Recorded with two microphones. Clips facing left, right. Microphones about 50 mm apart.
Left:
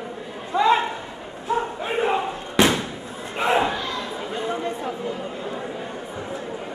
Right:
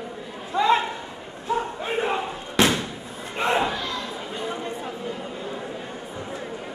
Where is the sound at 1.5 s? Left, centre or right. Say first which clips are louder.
Left 1 dB; centre.